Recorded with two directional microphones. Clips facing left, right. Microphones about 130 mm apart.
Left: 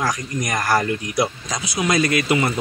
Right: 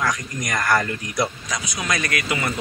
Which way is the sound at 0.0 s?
30° left (ahead or behind).